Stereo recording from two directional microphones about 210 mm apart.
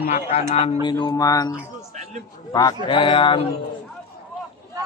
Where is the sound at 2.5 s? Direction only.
20° left (ahead or behind).